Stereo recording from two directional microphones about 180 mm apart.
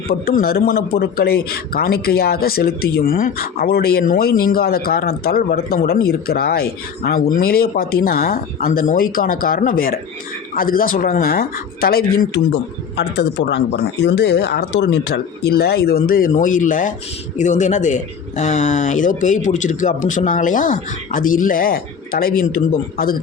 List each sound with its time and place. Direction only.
0.1 s a man's voice: 55° left (ahead or behind)
13.0 s a man's voice: 75° left (ahead or behind); by 23.1 s 55° left (ahead or behind)